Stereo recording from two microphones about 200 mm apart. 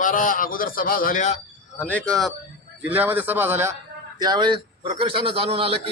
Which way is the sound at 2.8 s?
10° right (ahead or behind).